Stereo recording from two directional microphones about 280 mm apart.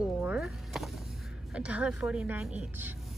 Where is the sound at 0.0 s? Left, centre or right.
Centre.